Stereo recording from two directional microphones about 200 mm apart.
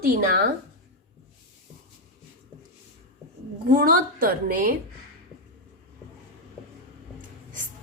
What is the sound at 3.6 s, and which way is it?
A woman's voice, 45° right (ahead or behind).